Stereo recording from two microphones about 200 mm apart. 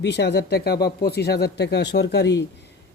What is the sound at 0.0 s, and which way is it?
Speech, 55° left (ahead or behind).